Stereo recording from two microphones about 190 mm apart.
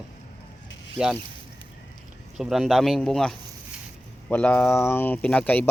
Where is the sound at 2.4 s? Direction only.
Centre (ahead or behind).